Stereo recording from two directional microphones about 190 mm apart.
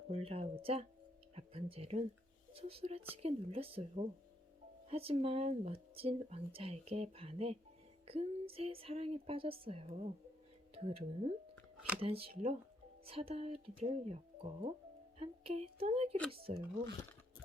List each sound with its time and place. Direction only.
0.1 s speech: 30° right (ahead or behind)